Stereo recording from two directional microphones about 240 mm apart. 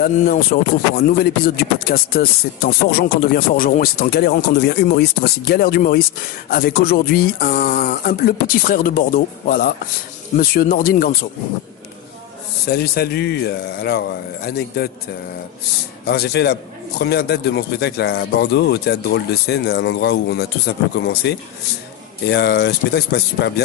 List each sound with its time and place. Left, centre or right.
0.0 s speech: left
12.6 s speech: left
16.1 s speech: left